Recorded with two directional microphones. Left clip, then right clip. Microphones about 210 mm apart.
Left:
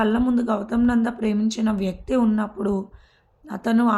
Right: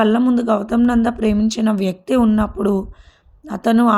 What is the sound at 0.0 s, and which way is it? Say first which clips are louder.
Speech: right 6 dB; 35° right (ahead or behind).